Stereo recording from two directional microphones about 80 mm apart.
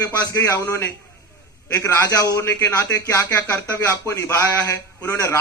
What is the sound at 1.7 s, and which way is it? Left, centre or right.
Speech, left.